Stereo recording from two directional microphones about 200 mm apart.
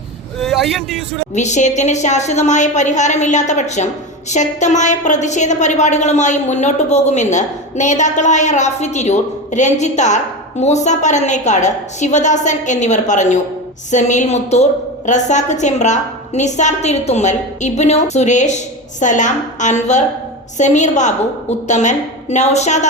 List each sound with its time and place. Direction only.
0.3 s a man's voice: centre (ahead or behind)
1.3 s a woman's voice: 35° left (ahead or behind)